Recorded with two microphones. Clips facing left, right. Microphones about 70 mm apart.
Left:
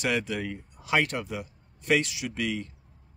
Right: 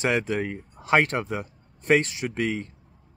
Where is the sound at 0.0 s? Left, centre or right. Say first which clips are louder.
Right 4 dB; right.